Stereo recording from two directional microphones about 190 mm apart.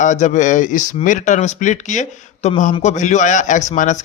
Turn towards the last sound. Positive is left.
turn(degrees=40)  # may be behind; listen again after turning